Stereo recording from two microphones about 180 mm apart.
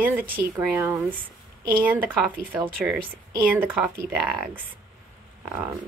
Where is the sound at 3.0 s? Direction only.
55° right (ahead or behind).